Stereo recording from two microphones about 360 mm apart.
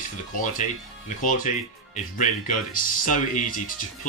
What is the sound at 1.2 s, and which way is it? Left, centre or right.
Speech, left.